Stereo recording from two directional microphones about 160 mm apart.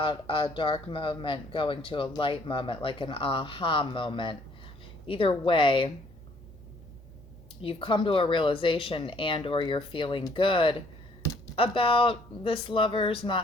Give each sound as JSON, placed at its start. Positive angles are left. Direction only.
{"t": 0.0, "sound": "speech", "side_deg": 30}
{"t": 7.6, "sound": "speech", "side_deg": 35}